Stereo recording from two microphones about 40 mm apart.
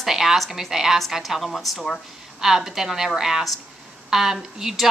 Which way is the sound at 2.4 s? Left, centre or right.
Centre.